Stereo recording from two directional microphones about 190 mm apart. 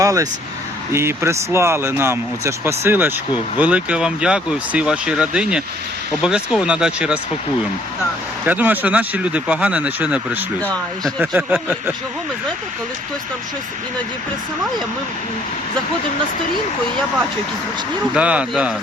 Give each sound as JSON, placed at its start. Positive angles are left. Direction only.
{"t": 0.0, "sound": "speech", "side_deg": -15}
{"t": 8.4, "sound": "speech", "side_deg": -10}
{"t": 10.6, "sound": "speech", "side_deg": 5}
{"t": 11.2, "sound": "speech", "side_deg": -10}
{"t": 18.1, "sound": "speech", "side_deg": -5}